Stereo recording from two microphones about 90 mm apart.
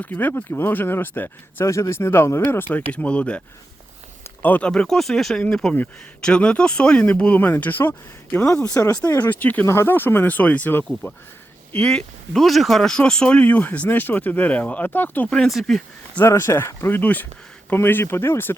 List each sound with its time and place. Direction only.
0.0 s speech: 20° left (ahead or behind)
1.6 s speech: 35° left (ahead or behind); by 3.4 s 15° left (ahead or behind)
4.4 s speech: 15° left (ahead or behind)
15.3 s speech: 5° left (ahead or behind)
16.1 s speech: 30° left (ahead or behind)